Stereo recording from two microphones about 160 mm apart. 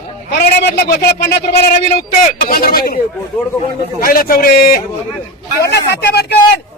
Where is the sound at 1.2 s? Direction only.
80° left.